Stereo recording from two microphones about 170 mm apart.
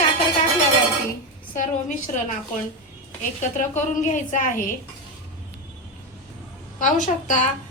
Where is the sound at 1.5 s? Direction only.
50° left (ahead or behind).